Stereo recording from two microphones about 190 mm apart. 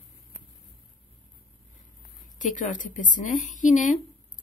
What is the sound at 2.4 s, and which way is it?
A woman's voice, 40° left (ahead or behind).